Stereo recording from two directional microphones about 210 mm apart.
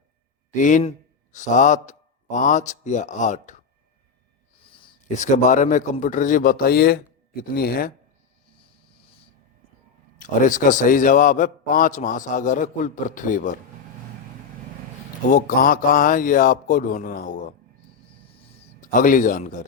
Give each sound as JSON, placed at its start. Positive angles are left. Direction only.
{"t": 0.5, "sound": "a man's voice", "side_deg": 35}
{"t": 4.6, "sound": "a sound", "side_deg": 25}
{"t": 5.0, "sound": "a man's voice", "side_deg": 35}
{"t": 10.2, "sound": "a man's voice", "side_deg": 40}
{"t": 15.3, "sound": "a man's voice", "side_deg": 40}
{"t": 18.3, "sound": "a sound", "side_deg": 25}
{"t": 18.8, "sound": "speech", "side_deg": 40}